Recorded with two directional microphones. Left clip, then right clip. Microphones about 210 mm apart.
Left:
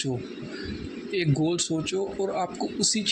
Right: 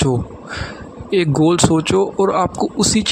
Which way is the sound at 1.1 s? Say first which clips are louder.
Right 12 dB; 50° right (ahead or behind).